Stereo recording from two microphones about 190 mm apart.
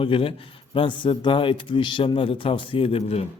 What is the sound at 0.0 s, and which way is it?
A man's voice, 30° left (ahead or behind).